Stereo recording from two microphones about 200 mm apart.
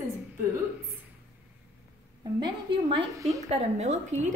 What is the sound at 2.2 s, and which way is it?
A woman's voice, 25° right (ahead or behind).